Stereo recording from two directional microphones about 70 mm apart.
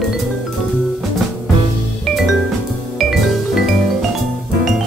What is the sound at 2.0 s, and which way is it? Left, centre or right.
Music, centre.